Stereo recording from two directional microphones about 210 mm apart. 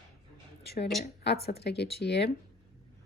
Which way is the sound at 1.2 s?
50° left (ahead or behind).